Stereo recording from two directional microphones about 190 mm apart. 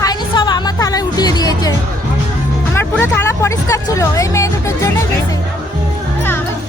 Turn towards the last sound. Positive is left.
turn(degrees=15)  # may be behind; listen again after turning